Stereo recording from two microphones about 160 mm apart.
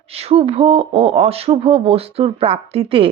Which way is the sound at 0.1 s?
40° right (ahead or behind).